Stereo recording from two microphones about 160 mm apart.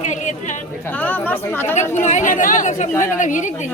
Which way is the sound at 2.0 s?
50° left (ahead or behind).